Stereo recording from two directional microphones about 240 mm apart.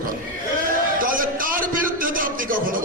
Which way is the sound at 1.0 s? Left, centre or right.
Right.